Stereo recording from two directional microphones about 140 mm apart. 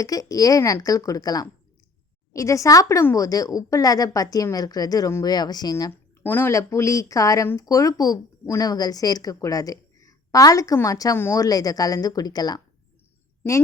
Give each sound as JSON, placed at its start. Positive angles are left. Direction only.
{"t": 0.0, "sound": "speech", "side_deg": 25}
{"t": 6.2, "sound": "speech", "side_deg": 15}